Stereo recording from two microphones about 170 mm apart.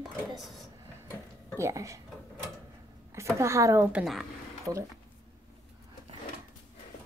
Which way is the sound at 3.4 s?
15° right (ahead or behind).